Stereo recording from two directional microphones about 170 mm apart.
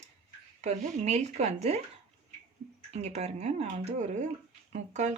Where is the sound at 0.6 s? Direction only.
40° right (ahead or behind).